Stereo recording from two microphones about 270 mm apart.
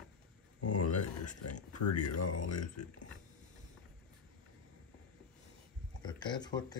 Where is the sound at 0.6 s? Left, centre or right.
Left.